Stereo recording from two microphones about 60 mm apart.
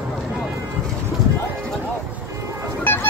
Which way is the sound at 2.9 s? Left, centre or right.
Left.